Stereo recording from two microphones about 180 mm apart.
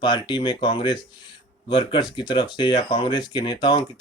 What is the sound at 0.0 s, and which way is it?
Speech, 25° left (ahead or behind).